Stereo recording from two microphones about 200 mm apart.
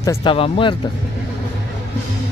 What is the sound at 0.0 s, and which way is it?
Speech, 20° left (ahead or behind).